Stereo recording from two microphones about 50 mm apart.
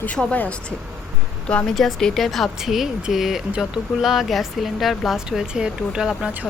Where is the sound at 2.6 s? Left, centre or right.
Centre.